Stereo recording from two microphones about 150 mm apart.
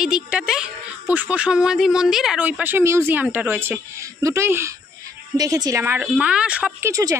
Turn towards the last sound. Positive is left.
turn(degrees=-20)  # may be behind; listen again after turning